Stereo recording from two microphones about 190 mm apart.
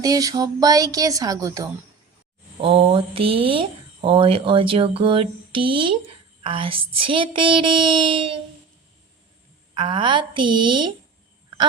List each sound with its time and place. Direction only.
0.0 s speech: 20° right (ahead or behind)
2.6 s speech: 30° right (ahead or behind)
9.7 s speech: 25° right (ahead or behind)